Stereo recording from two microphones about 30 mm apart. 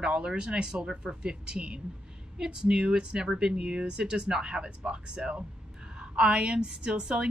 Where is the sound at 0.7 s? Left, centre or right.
Right.